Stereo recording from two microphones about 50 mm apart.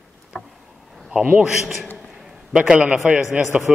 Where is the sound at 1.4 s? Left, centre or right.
Centre.